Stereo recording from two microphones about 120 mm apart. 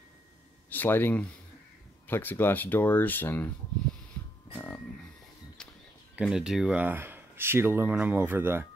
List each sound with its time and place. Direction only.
0.7 s speech: 15° left (ahead or behind)
4.6 s a sound: 15° left (ahead or behind)
6.2 s speech: 5° right (ahead or behind)